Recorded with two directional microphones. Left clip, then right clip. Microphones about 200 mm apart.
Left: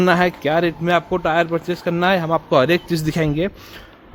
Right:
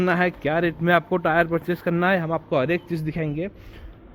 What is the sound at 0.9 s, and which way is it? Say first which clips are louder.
Speech: left 2 dB; 10° left (ahead or behind).